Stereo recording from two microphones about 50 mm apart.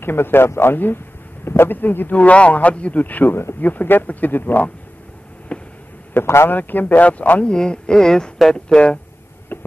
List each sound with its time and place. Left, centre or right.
0.0 s a man's voice: left
2.1 s a man's voice: left
3.3 s speech: left
3.6 s speech: left
5.5 s a sound: left
6.2 s speech: left
6.5 s speech: left
7.5 s speech: centre
9.5 s a sound: left